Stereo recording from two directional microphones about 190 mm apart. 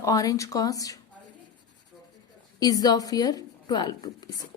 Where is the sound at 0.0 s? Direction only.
20° left (ahead or behind).